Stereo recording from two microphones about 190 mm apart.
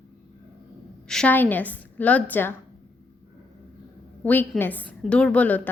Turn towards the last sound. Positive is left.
turn(degrees=10)  # may be behind; listen again after turning